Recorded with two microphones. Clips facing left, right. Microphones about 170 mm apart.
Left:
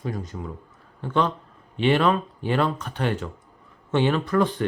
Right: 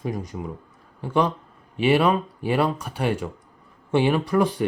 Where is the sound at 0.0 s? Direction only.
15° right (ahead or behind).